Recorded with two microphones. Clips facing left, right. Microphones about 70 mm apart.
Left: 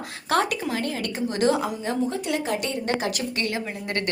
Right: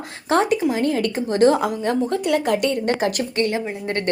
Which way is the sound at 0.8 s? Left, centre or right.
Right.